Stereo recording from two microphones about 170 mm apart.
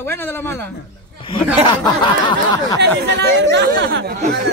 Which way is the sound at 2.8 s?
80° right.